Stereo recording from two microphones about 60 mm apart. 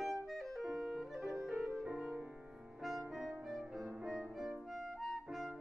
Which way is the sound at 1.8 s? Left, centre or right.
Right.